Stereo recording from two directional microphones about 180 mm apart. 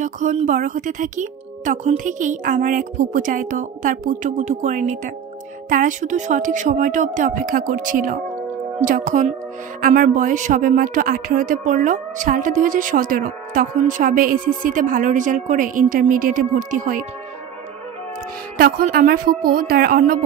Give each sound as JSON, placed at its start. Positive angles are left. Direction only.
{"t": 0.0, "sound": "speech", "side_deg": -45}
{"t": 18.6, "sound": "speech", "side_deg": -50}